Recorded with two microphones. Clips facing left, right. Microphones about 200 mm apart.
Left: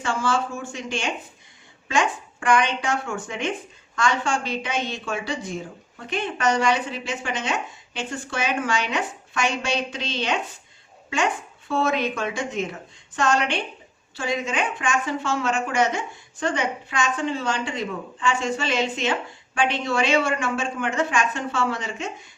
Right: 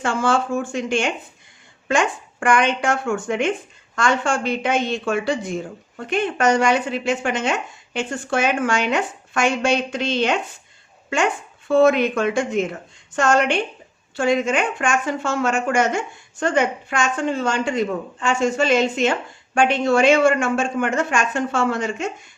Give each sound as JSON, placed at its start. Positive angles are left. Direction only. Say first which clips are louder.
{"t": 0.0, "sound": "a woman's voice", "louder": "right 4 dB", "side_deg": -55}
{"t": 11.7, "sound": "a woman's voice", "louder": "right 8 dB", "side_deg": -50}